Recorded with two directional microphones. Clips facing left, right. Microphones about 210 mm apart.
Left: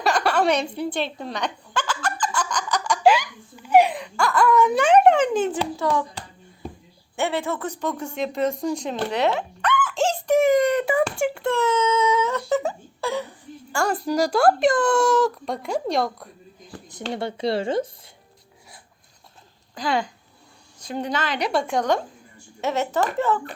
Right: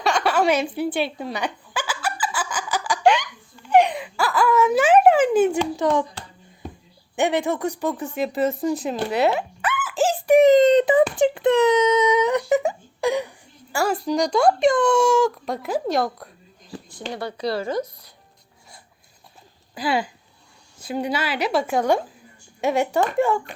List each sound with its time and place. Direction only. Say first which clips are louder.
0.0 s a sound: right 1 dB; centre (ahead or behind); by 6.1 s 20° right (ahead or behind)
7.2 s a woman's voice: right 4 dB; 15° right (ahead or behind)
8.6 s a sound: right 2 dB; 5° right (ahead or behind)
13.7 s a woman's voice: right 1 dB; 5° right (ahead or behind)
16.9 s speech: left 2 dB; 25° left (ahead or behind)
19.7 s a woman's voice: right 1 dB; 5° right (ahead or behind)